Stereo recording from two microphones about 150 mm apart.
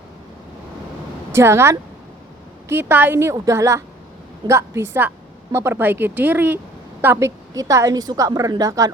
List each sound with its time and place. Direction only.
1.4 s a woman's voice: 15° right (ahead or behind)